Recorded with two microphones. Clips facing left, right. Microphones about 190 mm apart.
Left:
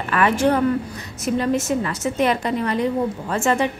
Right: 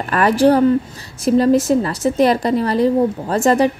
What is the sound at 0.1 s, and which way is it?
A woman's voice, 35° right (ahead or behind).